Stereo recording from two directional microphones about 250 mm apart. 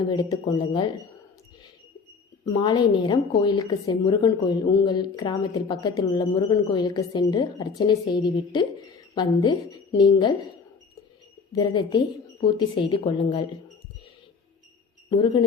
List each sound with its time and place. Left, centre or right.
0.1 s a woman's voice: centre
2.4 s a woman's voice: centre
11.5 s a woman's voice: centre
15.1 s a woman's voice: centre